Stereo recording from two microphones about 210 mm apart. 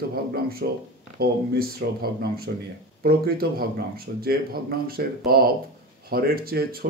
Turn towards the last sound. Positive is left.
turn(degrees=-45)  # may be behind; listen again after turning